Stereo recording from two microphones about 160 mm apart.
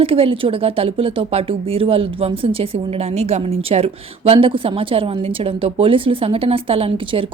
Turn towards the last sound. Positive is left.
turn(degrees=-35)  # may be behind; listen again after turning